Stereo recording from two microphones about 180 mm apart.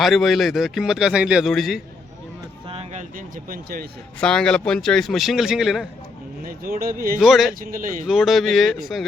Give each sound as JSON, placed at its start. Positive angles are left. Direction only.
{"t": 0.0, "sound": "a man's voice", "side_deg": 0}
{"t": 3.2, "sound": "speech", "side_deg": -55}
{"t": 4.2, "sound": "a man's voice", "side_deg": 5}
{"t": 6.4, "sound": "speech", "side_deg": -55}
{"t": 7.2, "sound": "a man's voice", "side_deg": 0}
{"t": 7.7, "sound": "speech", "side_deg": -50}
{"t": 8.0, "sound": "a man's voice", "side_deg": 0}